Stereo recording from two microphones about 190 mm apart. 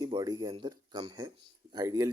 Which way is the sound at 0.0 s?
20° right (ahead or behind).